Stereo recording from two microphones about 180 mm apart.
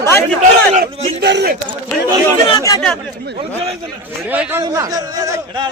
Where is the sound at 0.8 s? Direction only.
65° right (ahead or behind).